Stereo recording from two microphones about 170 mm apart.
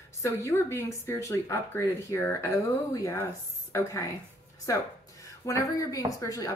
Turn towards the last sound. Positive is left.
turn(degrees=20)  # may be behind; listen again after turning